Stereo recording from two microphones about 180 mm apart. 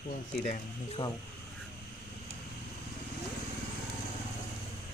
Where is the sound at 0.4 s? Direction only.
40° left (ahead or behind).